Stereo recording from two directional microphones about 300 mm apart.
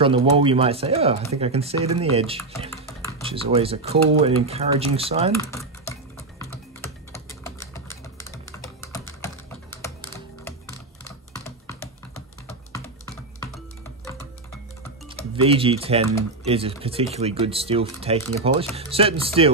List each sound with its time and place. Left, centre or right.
0.0 s speech: centre
2.7 s a sound: centre
3.2 s speech: centre
6.1 s typing: centre
15.4 s speech: centre